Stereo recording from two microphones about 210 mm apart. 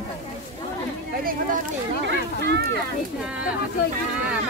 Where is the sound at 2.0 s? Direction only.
55° right (ahead or behind).